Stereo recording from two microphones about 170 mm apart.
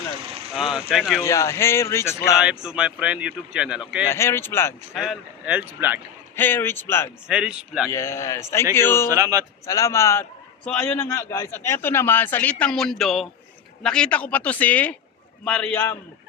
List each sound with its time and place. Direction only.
0.5 s speech: 5° right (ahead or behind)
1.2 s a man's voice: 15° left (ahead or behind)
2.4 s speech: 5° right (ahead or behind)
4.0 s a man's voice: 15° left (ahead or behind)
4.9 s speech: centre (ahead or behind)
6.3 s a man's voice: 10° left (ahead or behind)
7.3 s speech: 5° right (ahead or behind)
7.9 s a man's voice: 15° left (ahead or behind)
9.0 s a man's voice: 20° right (ahead or behind)
9.6 s a man's voice: 20° left (ahead or behind)